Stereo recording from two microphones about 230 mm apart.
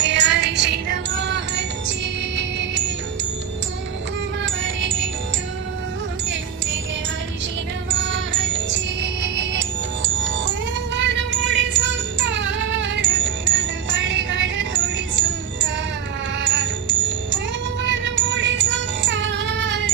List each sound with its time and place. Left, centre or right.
0.0 s music: right
4.4 s music: right
7.9 s music: right
16.4 s wind chime: right
17.8 s music: right